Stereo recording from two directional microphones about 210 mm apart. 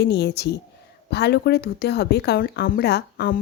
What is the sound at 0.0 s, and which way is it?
Speech, 50° left (ahead or behind).